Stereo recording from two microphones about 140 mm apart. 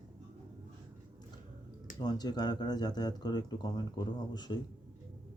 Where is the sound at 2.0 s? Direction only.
30° left (ahead or behind).